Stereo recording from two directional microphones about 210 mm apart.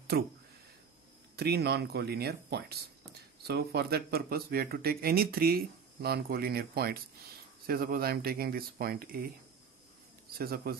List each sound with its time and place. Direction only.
0.1 s speech: 50° right (ahead or behind)
1.3 s speech: 50° right (ahead or behind)
10.3 s speech: 45° right (ahead or behind)